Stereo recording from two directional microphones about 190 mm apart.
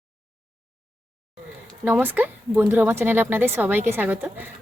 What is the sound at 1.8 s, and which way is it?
Speech, 10° right (ahead or behind).